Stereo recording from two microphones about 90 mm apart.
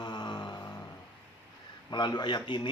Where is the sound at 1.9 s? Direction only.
55° left (ahead or behind).